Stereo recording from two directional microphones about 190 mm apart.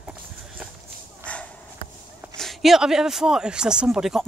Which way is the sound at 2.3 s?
Centre (ahead or behind).